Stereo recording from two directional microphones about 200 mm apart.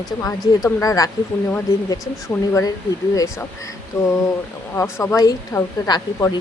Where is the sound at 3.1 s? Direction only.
15° left (ahead or behind).